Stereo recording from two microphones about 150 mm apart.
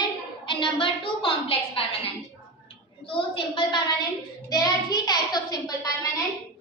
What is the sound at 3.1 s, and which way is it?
A woman's voice, 30° left (ahead or behind).